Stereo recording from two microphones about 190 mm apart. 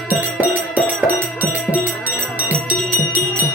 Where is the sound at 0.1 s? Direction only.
10° right (ahead or behind).